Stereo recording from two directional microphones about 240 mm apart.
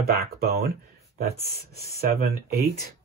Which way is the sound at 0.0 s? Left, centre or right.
Right.